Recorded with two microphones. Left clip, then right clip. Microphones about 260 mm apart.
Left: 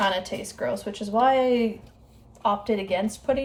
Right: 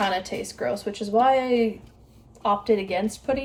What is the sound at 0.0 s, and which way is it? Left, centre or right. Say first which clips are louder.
Speech: even; centre.